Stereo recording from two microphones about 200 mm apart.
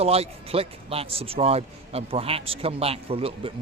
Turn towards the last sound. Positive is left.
turn(degrees=-30)  # may be behind; listen again after turning